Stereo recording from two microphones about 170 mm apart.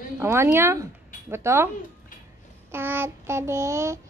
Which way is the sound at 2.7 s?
10° right (ahead or behind).